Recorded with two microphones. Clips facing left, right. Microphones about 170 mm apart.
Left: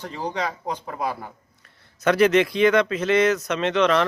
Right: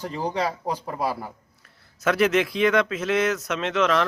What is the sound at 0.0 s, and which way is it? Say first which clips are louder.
Speech: right 2 dB; 10° right (ahead or behind).